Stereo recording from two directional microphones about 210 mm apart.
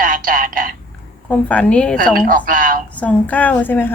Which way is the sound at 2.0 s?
40° right (ahead or behind).